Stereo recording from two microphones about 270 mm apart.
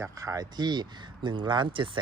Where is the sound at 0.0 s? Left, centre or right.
Centre.